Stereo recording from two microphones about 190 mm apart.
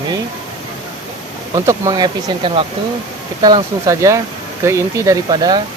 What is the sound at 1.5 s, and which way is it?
Speech, 15° right (ahead or behind).